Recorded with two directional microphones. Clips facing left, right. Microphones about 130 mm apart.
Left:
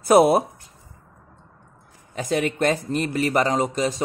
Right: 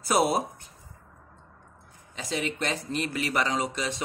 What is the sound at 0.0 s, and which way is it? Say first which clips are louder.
Speech: left 9 dB; 55° left (ahead or behind).